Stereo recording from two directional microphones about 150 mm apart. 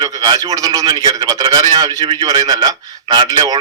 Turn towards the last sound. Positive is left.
turn(degrees=-25)  # may be behind; listen again after turning